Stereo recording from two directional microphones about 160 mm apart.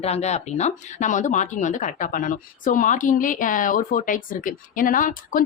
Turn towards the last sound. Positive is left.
turn(degrees=60)  # may be behind; listen again after turning